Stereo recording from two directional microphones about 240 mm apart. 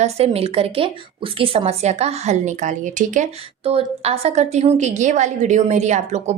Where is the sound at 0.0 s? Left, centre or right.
Right.